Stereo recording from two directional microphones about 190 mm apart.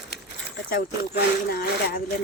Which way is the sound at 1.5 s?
50° left (ahead or behind).